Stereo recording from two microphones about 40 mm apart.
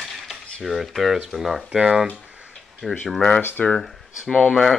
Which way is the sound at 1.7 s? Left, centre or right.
Centre.